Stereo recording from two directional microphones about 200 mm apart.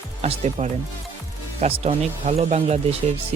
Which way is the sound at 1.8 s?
30° right (ahead or behind).